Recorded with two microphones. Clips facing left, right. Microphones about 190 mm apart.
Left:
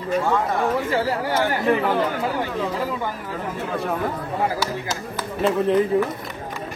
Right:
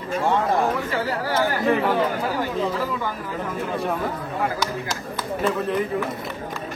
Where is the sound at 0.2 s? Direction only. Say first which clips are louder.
Right 5 dB; 25° right (ahead or behind).